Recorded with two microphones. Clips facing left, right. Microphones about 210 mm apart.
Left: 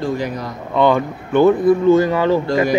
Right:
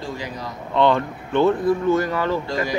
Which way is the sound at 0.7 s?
10° left (ahead or behind).